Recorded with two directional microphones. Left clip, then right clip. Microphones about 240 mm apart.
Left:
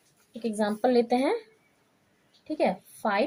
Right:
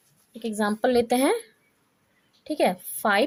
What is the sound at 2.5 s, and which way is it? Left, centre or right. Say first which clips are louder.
Speech: right 3 dB; right.